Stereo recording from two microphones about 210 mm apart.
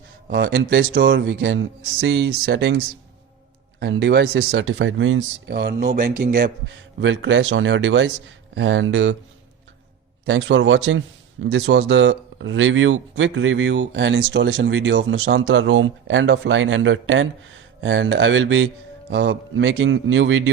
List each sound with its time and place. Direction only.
0.3 s speech: 55° right (ahead or behind)
10.2 s speech: 60° right (ahead or behind)